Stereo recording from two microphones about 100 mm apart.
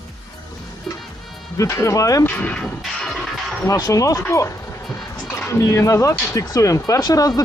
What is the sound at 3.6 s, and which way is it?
Speech, 35° left (ahead or behind).